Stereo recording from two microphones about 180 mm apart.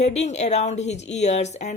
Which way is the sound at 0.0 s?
40° left (ahead or behind).